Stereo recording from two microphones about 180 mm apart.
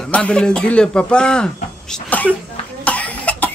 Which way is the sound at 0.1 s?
5° left (ahead or behind).